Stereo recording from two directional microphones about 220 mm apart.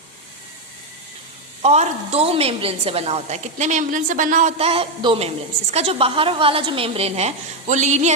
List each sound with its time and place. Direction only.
1.6 s a woman's voice: 30° right (ahead or behind)